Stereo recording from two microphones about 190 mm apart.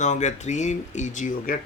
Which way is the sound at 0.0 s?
40° left (ahead or behind).